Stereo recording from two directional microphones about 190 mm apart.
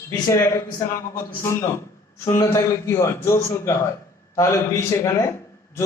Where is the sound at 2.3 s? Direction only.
15° left (ahead or behind).